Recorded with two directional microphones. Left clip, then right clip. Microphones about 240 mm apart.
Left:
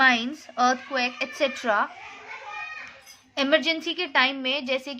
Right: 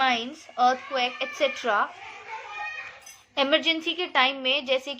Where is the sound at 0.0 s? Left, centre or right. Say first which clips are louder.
Left 4 dB; left.